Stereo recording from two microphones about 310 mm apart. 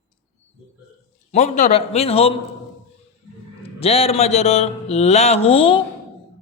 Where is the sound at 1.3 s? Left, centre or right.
Left.